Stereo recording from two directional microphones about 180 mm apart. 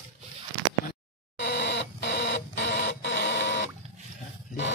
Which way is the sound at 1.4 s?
70° left (ahead or behind).